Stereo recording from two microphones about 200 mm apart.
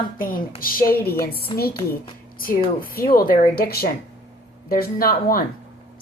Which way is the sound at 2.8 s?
45° left (ahead or behind).